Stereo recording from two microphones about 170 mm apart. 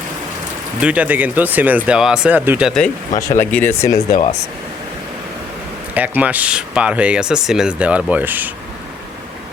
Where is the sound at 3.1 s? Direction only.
15° left (ahead or behind).